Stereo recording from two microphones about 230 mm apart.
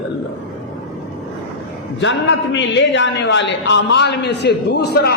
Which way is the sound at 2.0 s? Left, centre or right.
Left.